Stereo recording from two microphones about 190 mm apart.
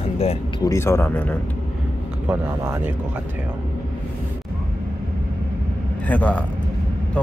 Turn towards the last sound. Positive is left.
turn(degrees=10)  # may be behind; listen again after turning